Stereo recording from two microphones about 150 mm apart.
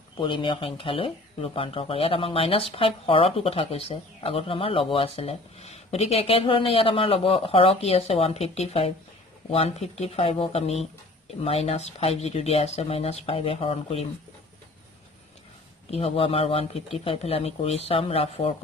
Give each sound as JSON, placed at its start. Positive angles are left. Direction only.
{"t": 0.2, "sound": "speech", "side_deg": 35}
{"t": 15.9, "sound": "speech", "side_deg": 40}